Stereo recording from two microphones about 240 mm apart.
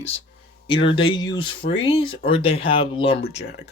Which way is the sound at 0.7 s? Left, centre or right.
Left.